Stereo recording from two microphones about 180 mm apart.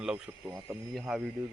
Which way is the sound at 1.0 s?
Centre (ahead or behind).